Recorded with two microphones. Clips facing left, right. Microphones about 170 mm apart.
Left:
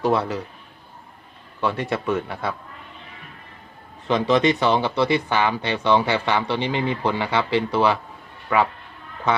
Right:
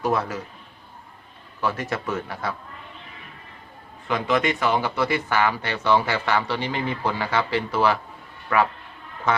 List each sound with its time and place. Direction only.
0.0 s a man's voice: 35° left (ahead or behind)
1.6 s speech: 25° left (ahead or behind)
4.1 s speech: 30° left (ahead or behind)